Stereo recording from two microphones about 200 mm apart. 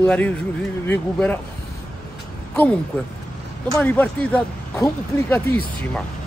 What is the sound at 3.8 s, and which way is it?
Speech, 10° left (ahead or behind).